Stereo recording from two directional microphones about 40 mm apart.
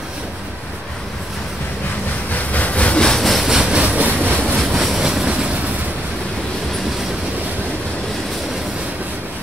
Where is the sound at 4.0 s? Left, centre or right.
Right.